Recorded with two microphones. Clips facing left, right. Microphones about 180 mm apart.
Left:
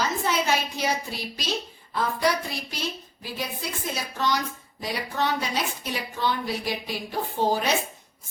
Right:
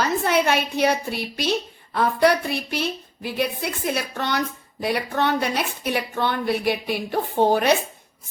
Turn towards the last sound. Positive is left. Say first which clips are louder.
# right 6 dB
turn(degrees=-60)  # may be behind; listen again after turning